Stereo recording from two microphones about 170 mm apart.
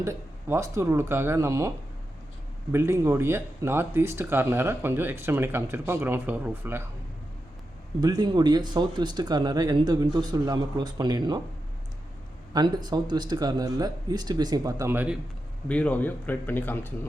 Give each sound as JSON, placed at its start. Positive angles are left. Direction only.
{"t": 0.0, "sound": "speech", "side_deg": -15}
{"t": 2.7, "sound": "speech", "side_deg": -15}
{"t": 8.0, "sound": "speech", "side_deg": -25}
{"t": 12.5, "sound": "speech", "side_deg": -25}
{"t": 15.7, "sound": "speech", "side_deg": 10}